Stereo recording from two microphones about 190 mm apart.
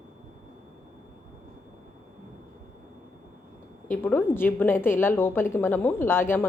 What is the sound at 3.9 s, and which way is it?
A woman's voice, 10° left (ahead or behind).